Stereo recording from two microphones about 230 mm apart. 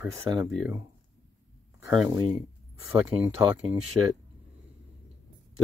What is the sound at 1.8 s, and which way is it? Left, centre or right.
Speech, centre.